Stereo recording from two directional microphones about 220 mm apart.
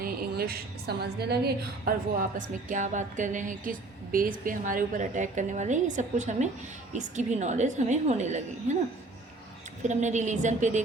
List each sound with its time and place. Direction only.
0.0 s a woman's voice: 45° right (ahead or behind)
2.4 s a woman's voice: 35° right (ahead or behind)
9.8 s a woman's voice: 35° right (ahead or behind)